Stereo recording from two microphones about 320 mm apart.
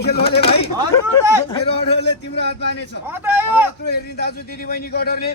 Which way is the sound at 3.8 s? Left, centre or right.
Left.